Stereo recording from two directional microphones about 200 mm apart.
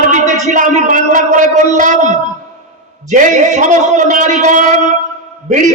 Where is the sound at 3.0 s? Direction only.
40° right (ahead or behind).